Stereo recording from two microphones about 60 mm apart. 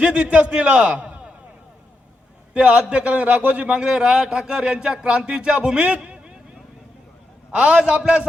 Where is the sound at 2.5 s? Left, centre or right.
Centre.